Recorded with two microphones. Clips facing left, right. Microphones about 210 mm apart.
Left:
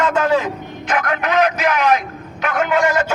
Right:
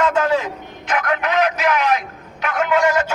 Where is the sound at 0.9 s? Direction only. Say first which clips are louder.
Left 1 dB; 45° left (ahead or behind).